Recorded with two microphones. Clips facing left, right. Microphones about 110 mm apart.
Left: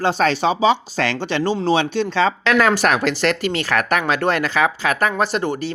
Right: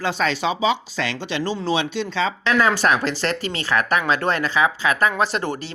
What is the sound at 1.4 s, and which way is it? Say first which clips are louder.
Speech: left 5 dB; 25° left (ahead or behind).